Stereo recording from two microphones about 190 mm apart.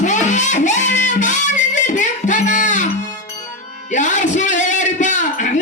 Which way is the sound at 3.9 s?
40° left (ahead or behind).